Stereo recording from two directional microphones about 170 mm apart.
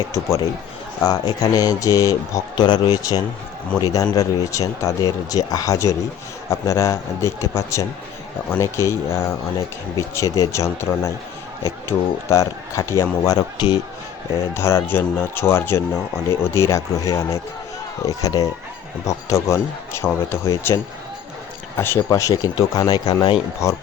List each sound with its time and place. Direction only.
0.1 s a man's voice: 15° left (ahead or behind)
21.8 s a man's voice: 15° left (ahead or behind)